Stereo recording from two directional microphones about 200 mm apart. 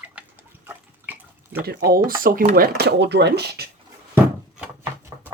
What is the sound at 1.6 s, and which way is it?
Speech, 50° right (ahead or behind).